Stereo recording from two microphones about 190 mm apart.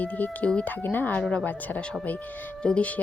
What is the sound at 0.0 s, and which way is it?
Speech, 10° left (ahead or behind).